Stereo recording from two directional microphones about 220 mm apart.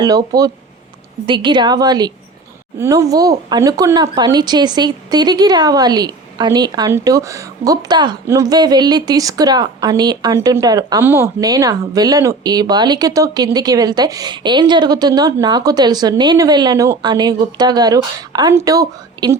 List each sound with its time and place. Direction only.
0.0 s a woman's voice: 15° right (ahead or behind)